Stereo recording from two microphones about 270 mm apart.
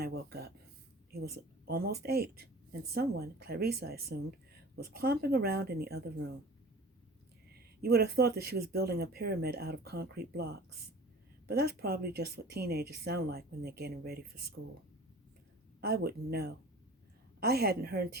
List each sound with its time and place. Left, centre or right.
0.0 s a sound: right
1.1 s speech: right
7.5 s speech: right
15.8 s speech: right